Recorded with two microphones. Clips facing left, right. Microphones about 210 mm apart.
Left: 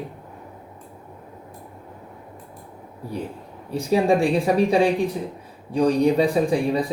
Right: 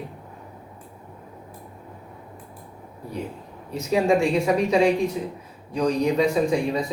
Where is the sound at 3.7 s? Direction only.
30° left (ahead or behind).